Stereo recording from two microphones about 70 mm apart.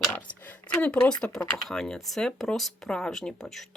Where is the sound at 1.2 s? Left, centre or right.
Centre.